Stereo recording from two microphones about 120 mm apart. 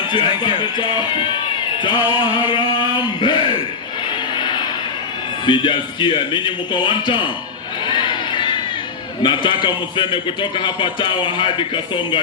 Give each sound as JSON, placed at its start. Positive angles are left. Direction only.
{"t": 0.1, "sound": "speech", "side_deg": 40}
{"t": 4.4, "sound": "vehicle", "side_deg": 40}
{"t": 5.5, "sound": "a man's voice", "side_deg": 45}
{"t": 7.9, "sound": "crowd", "side_deg": 40}
{"t": 9.2, "sound": "a man's voice", "side_deg": 40}